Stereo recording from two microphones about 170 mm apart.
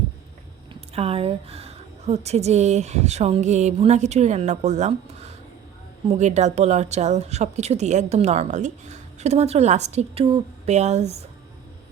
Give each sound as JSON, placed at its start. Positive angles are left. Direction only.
{"t": 0.7, "sound": "speech", "side_deg": -35}